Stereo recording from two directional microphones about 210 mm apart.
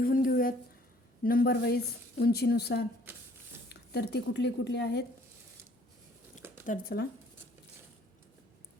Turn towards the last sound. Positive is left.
turn(degrees=45)  # may be behind; listen again after turning